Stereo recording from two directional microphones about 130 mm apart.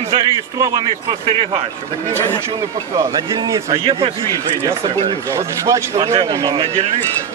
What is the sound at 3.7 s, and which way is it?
Speech, 45° right (ahead or behind).